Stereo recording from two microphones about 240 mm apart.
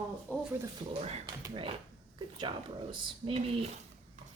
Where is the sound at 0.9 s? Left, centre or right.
Right.